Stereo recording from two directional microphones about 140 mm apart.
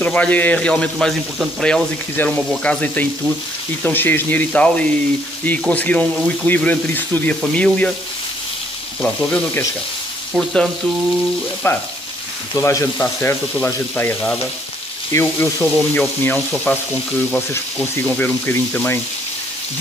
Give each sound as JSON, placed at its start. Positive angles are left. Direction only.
{"t": 0.0, "sound": "a man's voice", "side_deg": 10}
{"t": 9.0, "sound": "frying", "side_deg": 5}
{"t": 11.6, "sound": "a man's voice", "side_deg": 20}